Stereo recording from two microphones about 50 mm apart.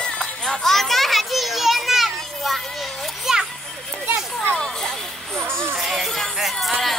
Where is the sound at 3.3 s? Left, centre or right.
Centre.